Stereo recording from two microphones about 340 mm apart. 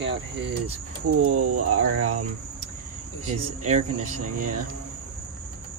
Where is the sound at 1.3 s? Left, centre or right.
Right.